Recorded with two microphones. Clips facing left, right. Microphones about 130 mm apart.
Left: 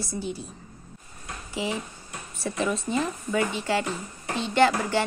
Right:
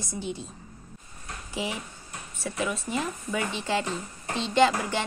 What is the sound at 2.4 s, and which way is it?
Speech, 5° right (ahead or behind).